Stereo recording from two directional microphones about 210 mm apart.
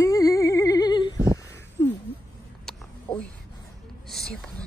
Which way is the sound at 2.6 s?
5° left (ahead or behind).